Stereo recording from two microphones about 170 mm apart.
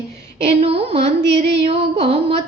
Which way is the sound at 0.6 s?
35° right (ahead or behind).